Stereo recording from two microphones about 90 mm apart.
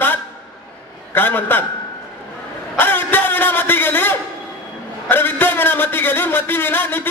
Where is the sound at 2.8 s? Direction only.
25° left (ahead or behind).